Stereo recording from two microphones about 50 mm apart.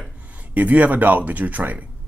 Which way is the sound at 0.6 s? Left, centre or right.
Right.